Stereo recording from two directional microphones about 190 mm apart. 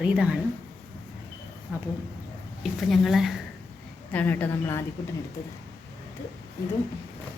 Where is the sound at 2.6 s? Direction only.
Centre (ahead or behind).